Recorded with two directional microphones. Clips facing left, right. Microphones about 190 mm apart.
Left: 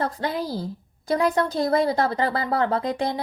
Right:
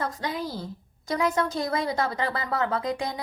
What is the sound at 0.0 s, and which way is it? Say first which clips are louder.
A woman's voice: left 4 dB; 35° left (ahead or behind).